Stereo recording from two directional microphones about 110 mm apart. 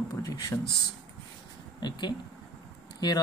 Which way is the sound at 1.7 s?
45° left (ahead or behind).